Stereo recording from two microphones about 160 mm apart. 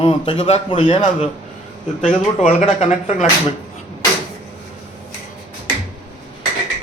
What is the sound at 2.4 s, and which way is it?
Speech, 45° left (ahead or behind).